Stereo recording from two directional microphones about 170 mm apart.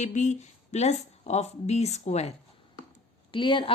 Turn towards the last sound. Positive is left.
turn(degrees=30)  # may be behind; listen again after turning